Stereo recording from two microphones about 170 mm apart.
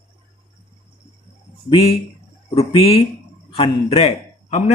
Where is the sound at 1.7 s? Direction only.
35° left (ahead or behind).